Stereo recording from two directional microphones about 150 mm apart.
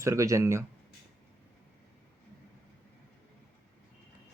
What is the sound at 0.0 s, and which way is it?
Speech, 20° right (ahead or behind).